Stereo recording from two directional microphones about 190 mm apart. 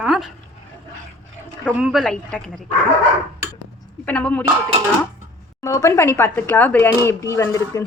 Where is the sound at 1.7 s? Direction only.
5° right (ahead or behind).